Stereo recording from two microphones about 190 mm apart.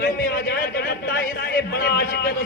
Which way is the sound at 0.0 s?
55° left (ahead or behind).